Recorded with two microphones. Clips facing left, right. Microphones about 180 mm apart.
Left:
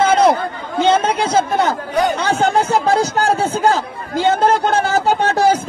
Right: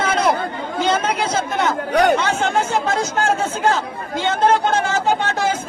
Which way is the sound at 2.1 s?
35° left (ahead or behind).